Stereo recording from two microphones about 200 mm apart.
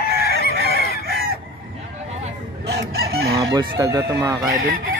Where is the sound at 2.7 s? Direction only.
55° right (ahead or behind).